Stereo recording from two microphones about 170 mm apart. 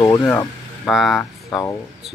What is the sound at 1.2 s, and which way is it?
Speech, 15° left (ahead or behind).